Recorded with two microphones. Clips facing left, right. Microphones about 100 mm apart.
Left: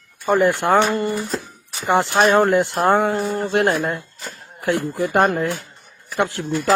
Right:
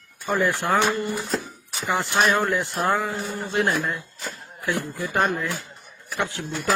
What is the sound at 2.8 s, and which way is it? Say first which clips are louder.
Speech: left 6 dB; 60° left (ahead or behind).